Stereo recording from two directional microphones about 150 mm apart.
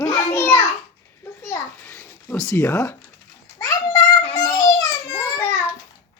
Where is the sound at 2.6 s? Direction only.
20° left (ahead or behind).